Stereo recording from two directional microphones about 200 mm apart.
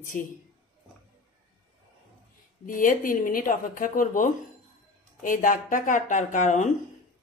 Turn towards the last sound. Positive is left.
turn(degrees=40)  # may be behind; listen again after turning